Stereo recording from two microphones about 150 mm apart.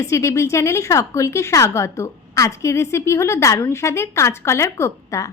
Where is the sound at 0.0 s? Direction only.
20° left (ahead or behind).